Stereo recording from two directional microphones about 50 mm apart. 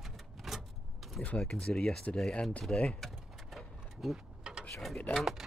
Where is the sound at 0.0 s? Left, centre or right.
Centre.